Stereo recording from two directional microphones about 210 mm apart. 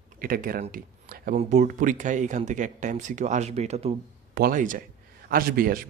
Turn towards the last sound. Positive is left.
turn(degrees=-45)  # may be behind; listen again after turning